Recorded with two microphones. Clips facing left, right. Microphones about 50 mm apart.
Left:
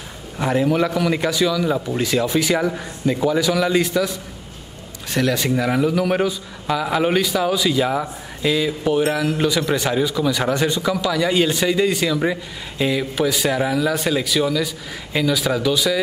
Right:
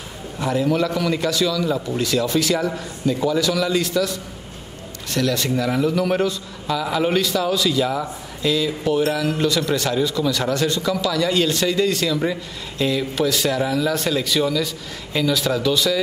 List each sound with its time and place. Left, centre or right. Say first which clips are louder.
0.4 s a man's voice: left 2 dB; left
0.7 s a man's voice: left 2 dB; centre